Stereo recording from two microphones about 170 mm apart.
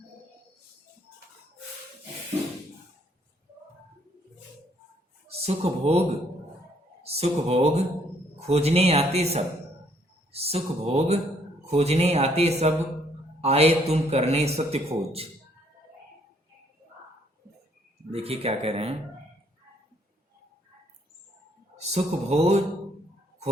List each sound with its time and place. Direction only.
5.3 s speech: 35° right (ahead or behind)
7.0 s speech: 40° right (ahead or behind)
18.1 s speech: 35° right (ahead or behind)
21.8 s speech: 40° right (ahead or behind)